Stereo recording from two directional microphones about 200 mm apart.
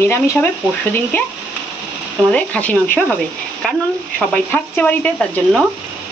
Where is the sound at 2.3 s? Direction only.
5° left (ahead or behind).